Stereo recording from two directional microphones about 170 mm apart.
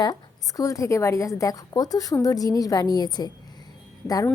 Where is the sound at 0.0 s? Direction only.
20° left (ahead or behind).